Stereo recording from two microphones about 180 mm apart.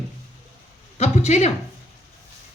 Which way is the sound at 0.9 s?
40° left (ahead or behind).